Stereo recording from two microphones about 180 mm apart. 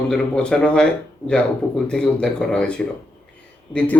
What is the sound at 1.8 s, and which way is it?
Speech, 5° left (ahead or behind).